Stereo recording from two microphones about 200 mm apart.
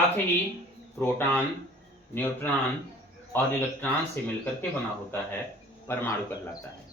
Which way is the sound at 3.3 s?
15° left (ahead or behind).